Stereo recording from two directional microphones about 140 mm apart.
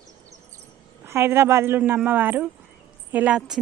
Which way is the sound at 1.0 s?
15° right (ahead or behind).